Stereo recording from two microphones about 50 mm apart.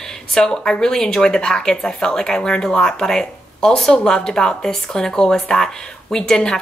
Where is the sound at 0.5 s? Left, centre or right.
Centre.